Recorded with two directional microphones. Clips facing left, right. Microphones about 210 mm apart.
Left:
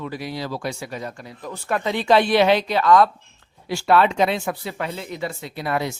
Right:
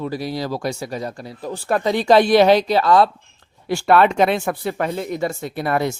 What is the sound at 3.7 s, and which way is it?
Speech, 55° right (ahead or behind).